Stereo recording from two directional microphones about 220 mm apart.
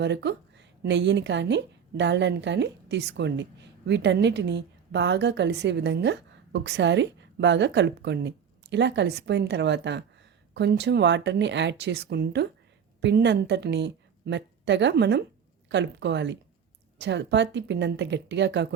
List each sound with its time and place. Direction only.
0.0 s a woman's voice: 50° right (ahead or behind)